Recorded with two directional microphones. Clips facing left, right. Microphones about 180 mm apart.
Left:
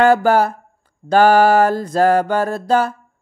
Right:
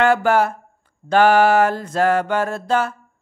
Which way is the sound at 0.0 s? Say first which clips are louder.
Left 3 dB; 40° left (ahead or behind).